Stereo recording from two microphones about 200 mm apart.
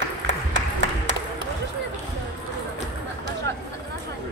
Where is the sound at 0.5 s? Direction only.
65° right (ahead or behind).